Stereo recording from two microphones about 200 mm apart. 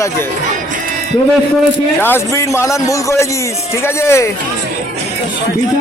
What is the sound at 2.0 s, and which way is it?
A man's voice, 10° left (ahead or behind).